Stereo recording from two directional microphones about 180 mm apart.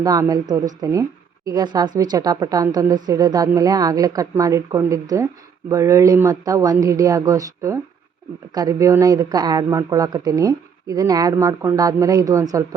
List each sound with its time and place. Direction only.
0.0 s a woman's voice: 20° right (ahead or behind)